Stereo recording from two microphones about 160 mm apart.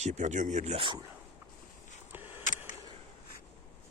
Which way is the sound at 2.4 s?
55° left (ahead or behind).